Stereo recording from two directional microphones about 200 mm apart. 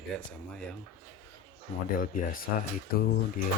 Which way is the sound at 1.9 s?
45° left (ahead or behind).